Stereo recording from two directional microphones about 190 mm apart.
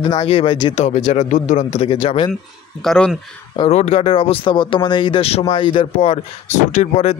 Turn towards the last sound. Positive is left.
turn(degrees=35)  # may be behind; listen again after turning